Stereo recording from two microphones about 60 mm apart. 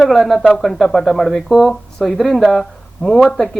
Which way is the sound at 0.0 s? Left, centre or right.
Centre.